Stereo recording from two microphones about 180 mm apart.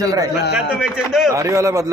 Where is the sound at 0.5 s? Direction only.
5° right (ahead or behind).